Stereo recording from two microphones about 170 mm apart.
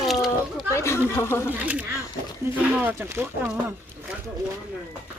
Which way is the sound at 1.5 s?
10° right (ahead or behind).